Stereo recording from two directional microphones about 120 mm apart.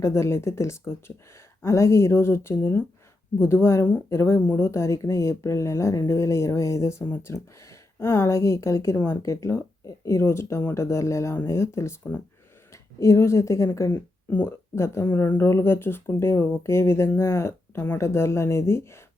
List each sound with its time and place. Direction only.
0.0 s speech: 25° left (ahead or behind)